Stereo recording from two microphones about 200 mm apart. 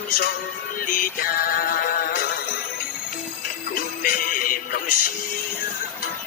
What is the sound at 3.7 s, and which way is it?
Music, 45° left (ahead or behind).